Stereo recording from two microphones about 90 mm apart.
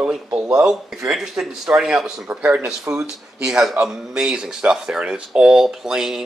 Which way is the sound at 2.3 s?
20° right (ahead or behind).